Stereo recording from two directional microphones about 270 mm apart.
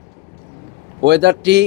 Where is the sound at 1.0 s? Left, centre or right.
Right.